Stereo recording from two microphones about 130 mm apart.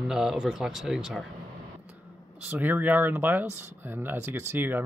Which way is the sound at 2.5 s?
15° right (ahead or behind).